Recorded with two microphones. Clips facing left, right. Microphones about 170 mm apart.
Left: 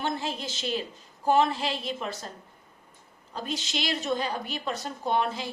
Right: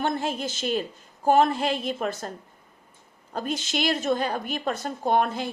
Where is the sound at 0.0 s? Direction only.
50° right (ahead or behind).